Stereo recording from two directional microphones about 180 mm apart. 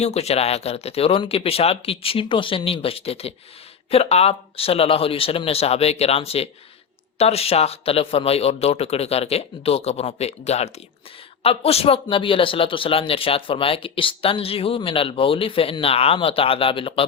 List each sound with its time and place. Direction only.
0.0 s speech: 35° left (ahead or behind)